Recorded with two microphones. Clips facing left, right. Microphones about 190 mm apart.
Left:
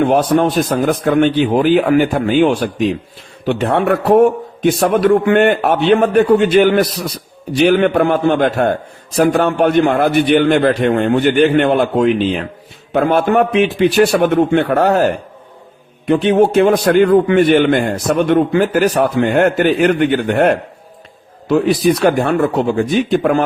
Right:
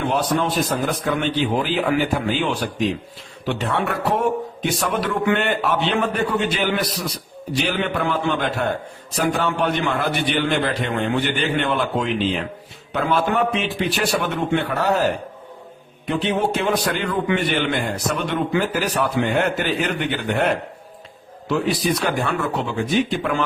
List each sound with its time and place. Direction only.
0.0 s a man's voice: 55° left (ahead or behind)
22.0 s a man's voice: 55° left (ahead or behind)